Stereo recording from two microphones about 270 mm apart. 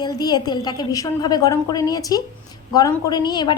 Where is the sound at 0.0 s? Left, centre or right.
Centre.